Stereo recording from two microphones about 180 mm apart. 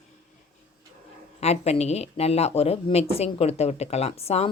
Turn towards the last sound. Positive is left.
turn(degrees=35)  # may be behind; listen again after turning